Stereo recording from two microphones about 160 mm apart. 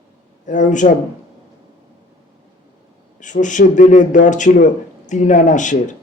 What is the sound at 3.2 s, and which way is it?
Speech, 50° left (ahead or behind).